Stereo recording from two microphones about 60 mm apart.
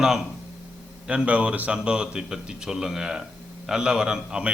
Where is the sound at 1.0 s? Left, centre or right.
Right.